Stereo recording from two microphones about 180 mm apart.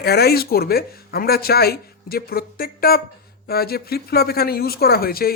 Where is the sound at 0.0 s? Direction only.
60° left (ahead or behind).